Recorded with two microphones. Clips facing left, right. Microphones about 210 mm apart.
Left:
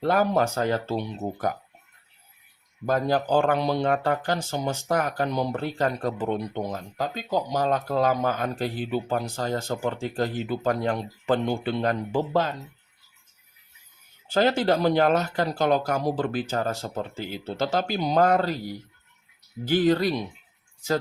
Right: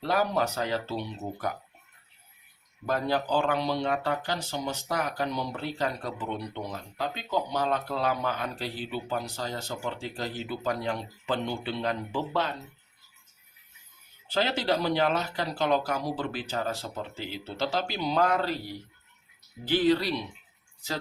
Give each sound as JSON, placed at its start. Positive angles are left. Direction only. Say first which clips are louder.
{"t": 0.0, "sound": "speech", "louder": "left 5 dB", "side_deg": 50}
{"t": 2.8, "sound": "speech", "louder": "left 4 dB", "side_deg": 45}
{"t": 14.3, "sound": "speech", "louder": "left 6 dB", "side_deg": 50}